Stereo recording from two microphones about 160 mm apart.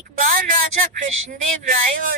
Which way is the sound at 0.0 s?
60° right (ahead or behind).